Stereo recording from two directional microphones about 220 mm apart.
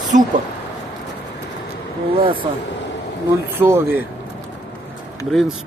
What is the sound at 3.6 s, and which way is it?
Speech, 10° right (ahead or behind).